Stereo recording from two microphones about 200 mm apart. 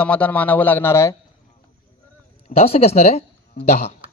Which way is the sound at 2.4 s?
30° left (ahead or behind).